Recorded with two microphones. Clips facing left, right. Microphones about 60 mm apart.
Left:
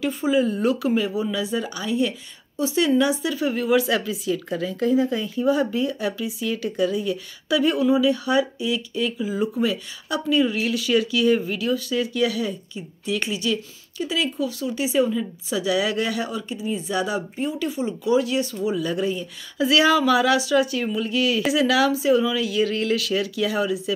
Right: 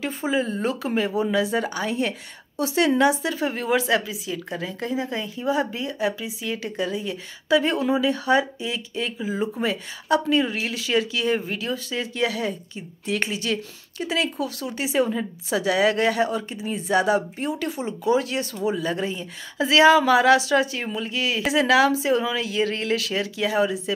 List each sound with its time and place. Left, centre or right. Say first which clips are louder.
0.0 s speech: left 4 dB; right
4.0 s a woman's voice: left 5 dB; centre; by 18.7 s right
18.7 s speech: even; right